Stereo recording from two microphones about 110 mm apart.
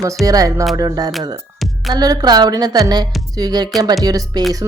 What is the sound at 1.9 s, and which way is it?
A woman's voice, 40° right (ahead or behind).